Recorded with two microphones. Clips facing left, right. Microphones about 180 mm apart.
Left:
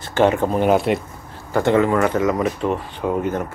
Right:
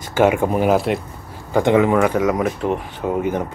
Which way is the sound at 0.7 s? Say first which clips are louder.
Even; centre (ahead or behind).